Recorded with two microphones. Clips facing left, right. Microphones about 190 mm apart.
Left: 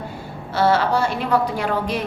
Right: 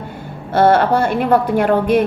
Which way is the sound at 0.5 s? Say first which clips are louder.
Right 6 dB; 55° right (ahead or behind).